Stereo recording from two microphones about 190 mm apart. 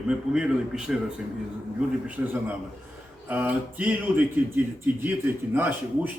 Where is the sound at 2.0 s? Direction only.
10° right (ahead or behind).